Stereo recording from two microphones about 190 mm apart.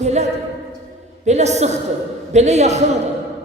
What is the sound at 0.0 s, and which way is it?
A woman's voice, 35° right (ahead or behind).